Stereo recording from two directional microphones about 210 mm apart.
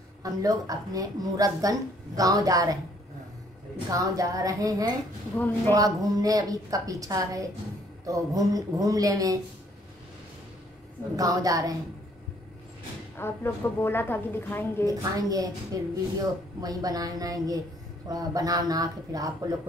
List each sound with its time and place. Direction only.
0.2 s a woman's voice: 15° right (ahead or behind)
3.9 s a woman's voice: 15° right (ahead or behind)
5.9 s a woman's voice: 15° right (ahead or behind)
11.1 s a woman's voice: 15° right (ahead or behind)
13.2 s a woman's voice: 10° left (ahead or behind)
14.9 s a woman's voice: 15° right (ahead or behind)